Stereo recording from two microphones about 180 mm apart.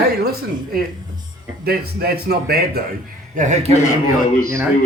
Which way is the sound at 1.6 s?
60° right (ahead or behind).